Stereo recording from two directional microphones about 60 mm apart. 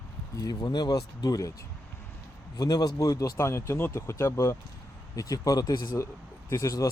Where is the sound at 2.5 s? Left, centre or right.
Left.